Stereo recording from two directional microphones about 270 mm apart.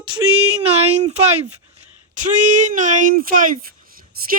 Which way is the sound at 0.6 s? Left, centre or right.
Right.